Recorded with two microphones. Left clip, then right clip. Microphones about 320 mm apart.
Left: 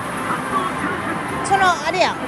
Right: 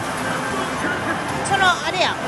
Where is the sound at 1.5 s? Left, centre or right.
Centre.